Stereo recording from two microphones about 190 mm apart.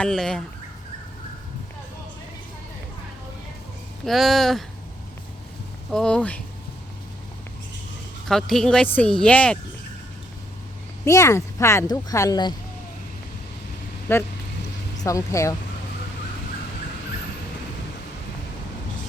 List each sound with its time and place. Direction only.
0.0 s speech: 5° left (ahead or behind)
4.0 s speech: centre (ahead or behind)
5.9 s speech: 5° left (ahead or behind)
8.3 s speech: centre (ahead or behind)
11.0 s speech: 15° left (ahead or behind)
14.1 s speech: 10° left (ahead or behind)